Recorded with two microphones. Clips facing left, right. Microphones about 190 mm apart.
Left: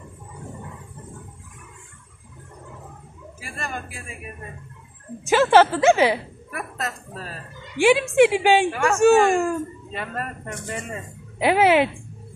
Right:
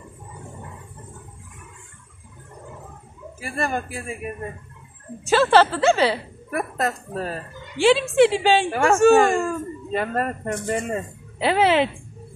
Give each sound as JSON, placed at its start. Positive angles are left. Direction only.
{"t": 3.3, "sound": "speech", "side_deg": -45}
{"t": 5.2, "sound": "a woman's voice", "side_deg": 15}
{"t": 6.5, "sound": "speech", "side_deg": -45}
{"t": 7.7, "sound": "a woman's voice", "side_deg": 15}
{"t": 8.7, "sound": "speech", "side_deg": -40}
{"t": 9.3, "sound": "a woman's voice", "side_deg": 15}
{"t": 9.9, "sound": "speech", "side_deg": -45}
{"t": 11.3, "sound": "a woman's voice", "side_deg": 10}